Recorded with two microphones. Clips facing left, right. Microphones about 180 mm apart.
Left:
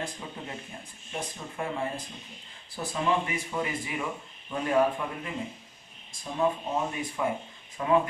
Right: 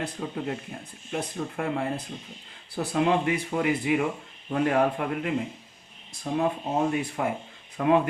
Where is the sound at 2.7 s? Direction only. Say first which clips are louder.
Right 4 dB; 65° right (ahead or behind).